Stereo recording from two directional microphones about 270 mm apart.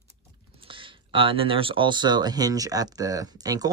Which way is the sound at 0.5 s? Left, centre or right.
Centre.